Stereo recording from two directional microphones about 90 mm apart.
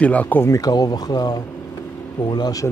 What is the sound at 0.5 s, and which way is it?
Speech, 45° left (ahead or behind).